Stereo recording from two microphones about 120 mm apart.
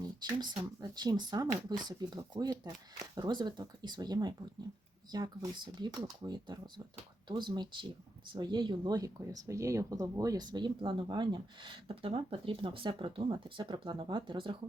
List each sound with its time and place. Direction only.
0.2 s speech: 35° right (ahead or behind)